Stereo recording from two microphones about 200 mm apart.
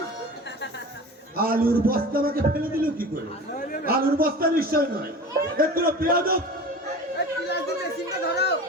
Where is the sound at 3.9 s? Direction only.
45° right (ahead or behind).